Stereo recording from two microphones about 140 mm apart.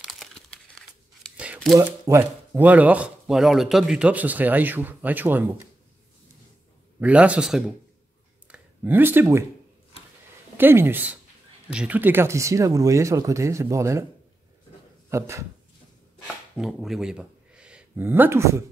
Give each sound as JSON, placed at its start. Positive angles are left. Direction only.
{"t": 0.0, "sound": "crumpling", "side_deg": 0}
{"t": 1.3, "sound": "a sound", "side_deg": -10}
{"t": 1.8, "sound": "speech", "side_deg": -20}
{"t": 7.0, "sound": "speech", "side_deg": -10}
{"t": 8.5, "sound": "a sound", "side_deg": -15}
{"t": 10.6, "sound": "speech", "side_deg": -15}
{"t": 15.0, "sound": "speech", "side_deg": -20}
{"t": 16.5, "sound": "speech", "side_deg": 0}